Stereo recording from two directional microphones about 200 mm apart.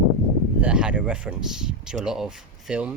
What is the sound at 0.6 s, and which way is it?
Speech, 5° right (ahead or behind).